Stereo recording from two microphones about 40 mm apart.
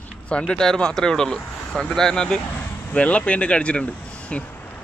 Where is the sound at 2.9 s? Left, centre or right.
Left.